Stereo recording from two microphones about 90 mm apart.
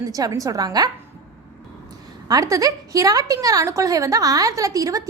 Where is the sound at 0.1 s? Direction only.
40° right (ahead or behind).